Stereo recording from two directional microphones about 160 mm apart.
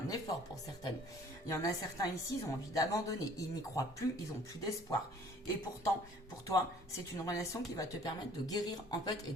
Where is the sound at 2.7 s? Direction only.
20° left (ahead or behind).